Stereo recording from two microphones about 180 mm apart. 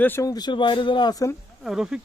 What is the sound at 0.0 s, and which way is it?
Speech, 15° left (ahead or behind).